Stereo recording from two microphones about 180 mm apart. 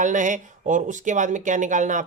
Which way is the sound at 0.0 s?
45° right (ahead or behind).